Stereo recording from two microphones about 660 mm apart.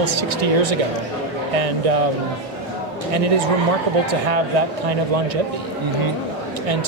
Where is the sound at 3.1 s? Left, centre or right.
Right.